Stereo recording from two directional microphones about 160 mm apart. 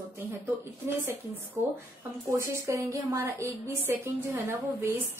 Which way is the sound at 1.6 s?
15° right (ahead or behind).